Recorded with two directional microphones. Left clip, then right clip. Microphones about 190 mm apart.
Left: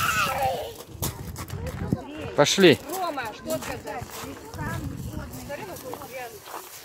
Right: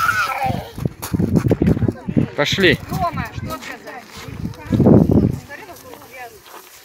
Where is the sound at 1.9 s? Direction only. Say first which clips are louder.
Right 2 dB; 5° left (ahead or behind).